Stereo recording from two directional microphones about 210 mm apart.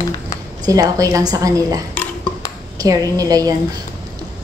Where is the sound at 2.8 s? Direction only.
15° right (ahead or behind).